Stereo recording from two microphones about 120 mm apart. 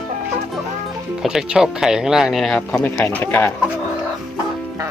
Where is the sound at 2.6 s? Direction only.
10° left (ahead or behind).